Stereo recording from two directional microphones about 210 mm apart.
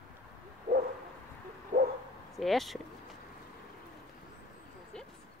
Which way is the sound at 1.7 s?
30° right (ahead or behind).